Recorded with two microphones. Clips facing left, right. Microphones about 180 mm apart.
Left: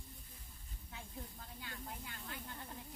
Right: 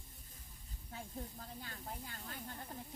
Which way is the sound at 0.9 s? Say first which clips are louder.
Right 4 dB; 40° right (ahead or behind).